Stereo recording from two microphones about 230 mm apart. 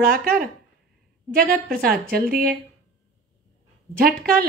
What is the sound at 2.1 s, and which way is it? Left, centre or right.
Speech, right.